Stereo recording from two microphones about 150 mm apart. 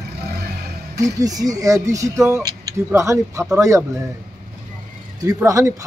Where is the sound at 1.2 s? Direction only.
25° right (ahead or behind).